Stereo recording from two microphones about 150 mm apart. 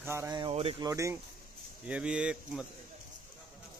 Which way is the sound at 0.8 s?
20° right (ahead or behind).